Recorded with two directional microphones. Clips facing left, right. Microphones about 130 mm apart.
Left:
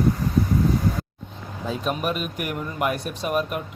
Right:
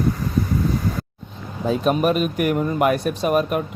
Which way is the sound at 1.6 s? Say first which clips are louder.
Right 7 dB; 55° right (ahead or behind).